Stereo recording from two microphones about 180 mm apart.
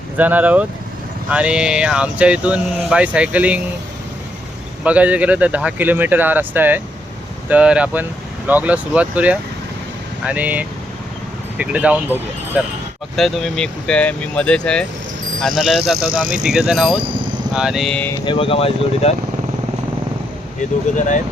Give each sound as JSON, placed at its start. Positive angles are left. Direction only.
{"t": 0.2, "sound": "speech", "side_deg": -10}
{"t": 4.8, "sound": "speech", "side_deg": -5}
{"t": 18.3, "sound": "speech", "side_deg": 30}